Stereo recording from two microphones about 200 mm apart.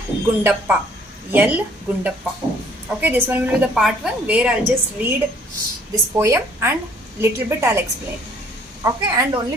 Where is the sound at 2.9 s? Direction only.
10° right (ahead or behind).